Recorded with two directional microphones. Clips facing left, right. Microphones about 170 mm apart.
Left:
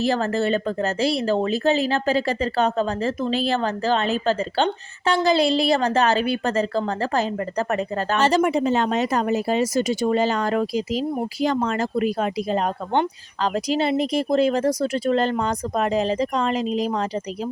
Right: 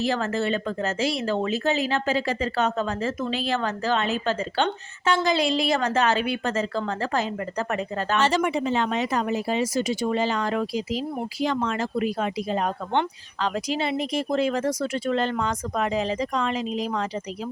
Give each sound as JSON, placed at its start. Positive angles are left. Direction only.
{"t": 0.0, "sound": "speech", "side_deg": 35}